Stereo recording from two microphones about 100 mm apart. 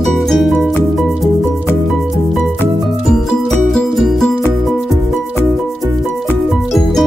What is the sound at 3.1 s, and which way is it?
Music, 5° left (ahead or behind).